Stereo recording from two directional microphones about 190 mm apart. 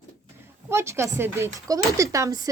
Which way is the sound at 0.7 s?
15° right (ahead or behind).